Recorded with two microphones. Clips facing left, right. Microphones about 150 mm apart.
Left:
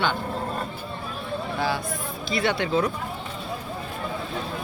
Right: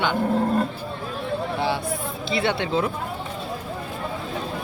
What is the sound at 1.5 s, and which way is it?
Speech, 25° right (ahead or behind).